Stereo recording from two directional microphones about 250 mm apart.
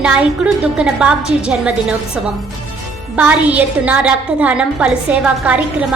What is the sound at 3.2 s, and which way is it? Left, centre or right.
A woman's voice, centre.